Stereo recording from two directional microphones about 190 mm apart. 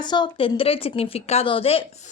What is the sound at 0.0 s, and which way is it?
Speech, 25° left (ahead or behind).